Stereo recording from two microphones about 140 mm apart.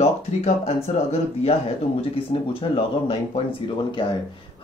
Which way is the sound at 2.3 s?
40° left (ahead or behind).